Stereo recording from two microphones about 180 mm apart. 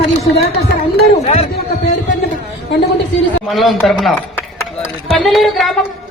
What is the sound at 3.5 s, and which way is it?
Speech, centre (ahead or behind).